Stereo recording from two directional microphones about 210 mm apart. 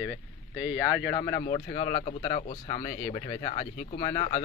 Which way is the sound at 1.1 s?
15° left (ahead or behind).